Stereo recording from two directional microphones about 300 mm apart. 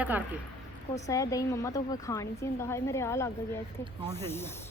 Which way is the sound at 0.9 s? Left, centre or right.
Centre.